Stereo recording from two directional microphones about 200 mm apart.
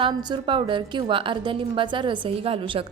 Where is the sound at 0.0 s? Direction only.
20° right (ahead or behind).